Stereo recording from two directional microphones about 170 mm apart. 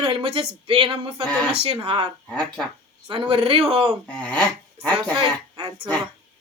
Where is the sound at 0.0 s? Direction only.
35° right (ahead or behind).